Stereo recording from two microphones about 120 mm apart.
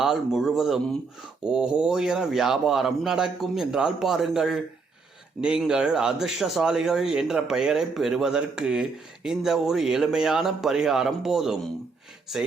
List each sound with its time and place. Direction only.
0.0 s speech: 5° right (ahead or behind)